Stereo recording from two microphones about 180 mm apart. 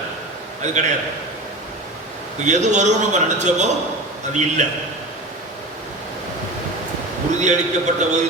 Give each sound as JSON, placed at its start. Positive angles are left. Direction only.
{"t": 0.6, "sound": "a man's voice", "side_deg": -40}
{"t": 2.4, "sound": "a man's voice", "side_deg": -40}
{"t": 7.4, "sound": "a man's voice", "side_deg": -40}